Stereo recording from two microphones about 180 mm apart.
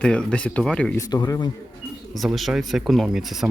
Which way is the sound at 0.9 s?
20° left (ahead or behind).